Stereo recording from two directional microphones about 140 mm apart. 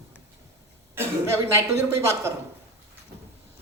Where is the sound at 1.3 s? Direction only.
20° right (ahead or behind).